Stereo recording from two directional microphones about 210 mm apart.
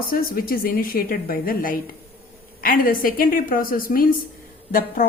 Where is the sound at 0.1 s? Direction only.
45° left (ahead or behind).